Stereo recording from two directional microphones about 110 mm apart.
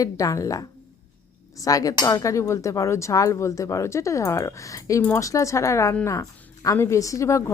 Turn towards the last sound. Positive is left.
turn(degrees=25)  # may be behind; listen again after turning